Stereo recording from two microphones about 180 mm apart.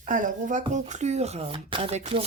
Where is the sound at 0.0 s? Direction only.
45° right (ahead or behind).